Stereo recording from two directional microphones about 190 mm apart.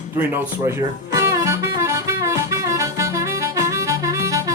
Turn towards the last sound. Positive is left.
turn(degrees=-15)  # may be behind; listen again after turning